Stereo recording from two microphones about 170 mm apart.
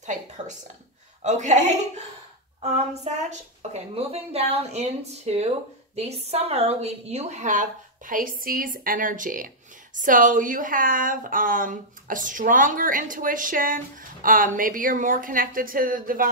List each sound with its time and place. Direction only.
0.0 s a woman's voice: 45° right (ahead or behind)
3.0 s a woman's voice: 45° right (ahead or behind)